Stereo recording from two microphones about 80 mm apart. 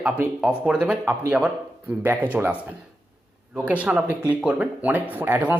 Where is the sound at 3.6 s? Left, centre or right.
Centre.